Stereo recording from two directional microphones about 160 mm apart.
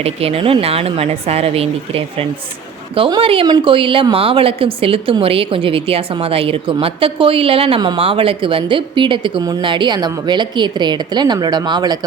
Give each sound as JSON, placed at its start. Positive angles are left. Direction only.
{"t": 0.0, "sound": "a woman's voice", "side_deg": -40}